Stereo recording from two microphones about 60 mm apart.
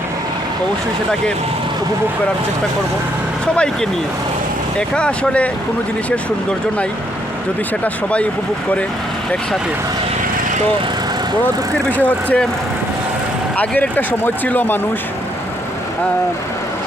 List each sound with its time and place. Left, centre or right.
3.4 s speech: centre
4.9 s speech: centre
11.4 s speech: left
13.6 s speech: left